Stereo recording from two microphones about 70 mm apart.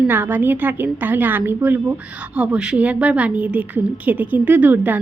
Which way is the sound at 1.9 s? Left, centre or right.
Centre.